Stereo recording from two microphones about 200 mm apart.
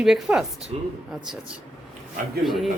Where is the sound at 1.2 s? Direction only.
5° right (ahead or behind).